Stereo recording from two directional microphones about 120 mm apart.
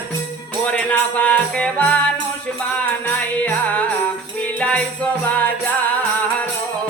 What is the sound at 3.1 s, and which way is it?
Music, 10° left (ahead or behind).